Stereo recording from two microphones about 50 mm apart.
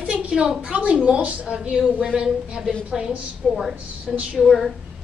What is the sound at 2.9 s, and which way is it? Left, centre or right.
A woman's voice, centre.